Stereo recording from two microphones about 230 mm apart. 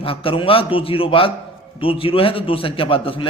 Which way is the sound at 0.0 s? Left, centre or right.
Left.